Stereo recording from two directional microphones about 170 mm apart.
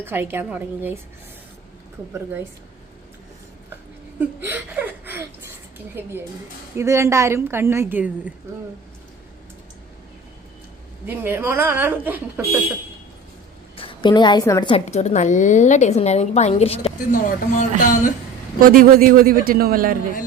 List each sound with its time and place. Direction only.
0.0 s a woman's voice: 10° right (ahead or behind)
4.2 s a woman's voice: 10° right (ahead or behind)
11.0 s a woman's voice: 10° right (ahead or behind)
13.7 s a woman's voice: 30° left (ahead or behind)
14.8 s a woman's voice: 40° left (ahead or behind)
17.1 s speech: 50° left (ahead or behind)
18.6 s a man's voice: 55° right (ahead or behind)